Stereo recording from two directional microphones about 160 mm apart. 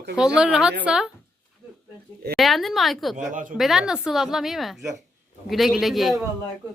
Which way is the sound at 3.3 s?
55° right (ahead or behind).